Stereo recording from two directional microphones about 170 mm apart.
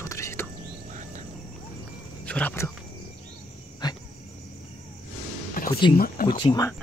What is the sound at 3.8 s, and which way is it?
Dog, 25° left (ahead or behind).